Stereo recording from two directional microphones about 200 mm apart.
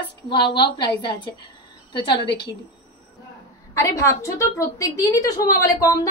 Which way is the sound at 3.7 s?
15° left (ahead or behind).